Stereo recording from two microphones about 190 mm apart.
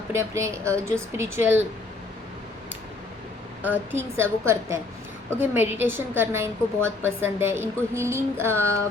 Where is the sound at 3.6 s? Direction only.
10° right (ahead or behind).